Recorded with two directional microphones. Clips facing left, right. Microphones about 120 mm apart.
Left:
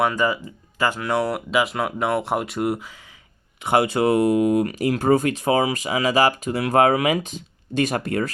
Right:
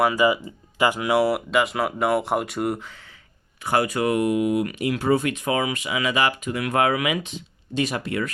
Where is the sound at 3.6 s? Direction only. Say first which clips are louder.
Left 3 dB; 25° left (ahead or behind).